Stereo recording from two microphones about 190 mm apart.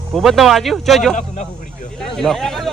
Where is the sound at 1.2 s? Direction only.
40° left (ahead or behind).